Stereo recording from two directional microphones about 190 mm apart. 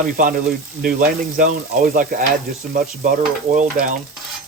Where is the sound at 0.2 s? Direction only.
45° right (ahead or behind).